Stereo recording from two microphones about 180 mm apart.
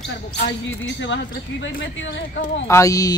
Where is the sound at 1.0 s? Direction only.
85° left.